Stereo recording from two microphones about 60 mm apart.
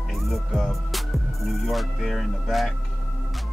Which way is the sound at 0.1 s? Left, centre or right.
Centre.